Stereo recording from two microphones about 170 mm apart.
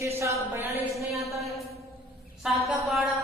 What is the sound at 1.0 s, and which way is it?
A woman's voice, centre (ahead or behind).